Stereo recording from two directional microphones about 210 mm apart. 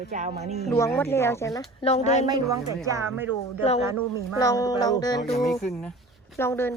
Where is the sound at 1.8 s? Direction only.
30° left (ahead or behind).